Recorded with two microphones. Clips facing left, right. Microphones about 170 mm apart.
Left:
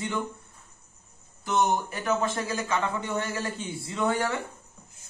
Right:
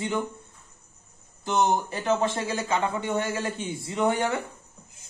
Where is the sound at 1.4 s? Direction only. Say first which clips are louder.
Right 1 dB; 25° right (ahead or behind).